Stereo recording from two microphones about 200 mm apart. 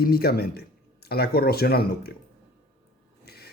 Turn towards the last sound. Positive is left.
turn(degrees=50)  # may be behind; listen again after turning